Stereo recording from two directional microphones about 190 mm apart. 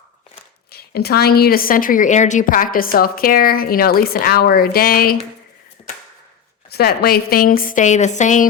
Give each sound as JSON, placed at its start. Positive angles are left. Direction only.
{"t": 0.7, "sound": "a woman's voice", "side_deg": 55}
{"t": 6.7, "sound": "a woman's voice", "side_deg": 55}